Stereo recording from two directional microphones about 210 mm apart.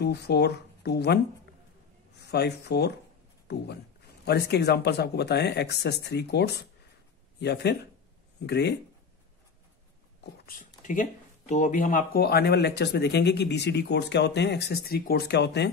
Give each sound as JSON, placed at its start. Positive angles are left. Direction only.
{"t": 0.0, "sound": "speech", "side_deg": 50}
{"t": 10.4, "sound": "speech", "side_deg": 40}